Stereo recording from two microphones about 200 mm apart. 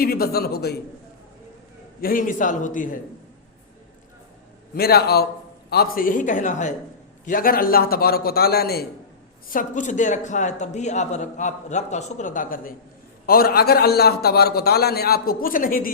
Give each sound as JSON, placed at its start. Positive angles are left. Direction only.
{"t": 0.0, "sound": "a man's voice", "side_deg": 50}
{"t": 2.0, "sound": "speech", "side_deg": 45}
{"t": 4.7, "sound": "a man's voice", "side_deg": 50}